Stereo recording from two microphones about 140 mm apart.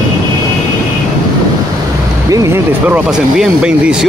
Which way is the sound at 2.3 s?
25° right (ahead or behind).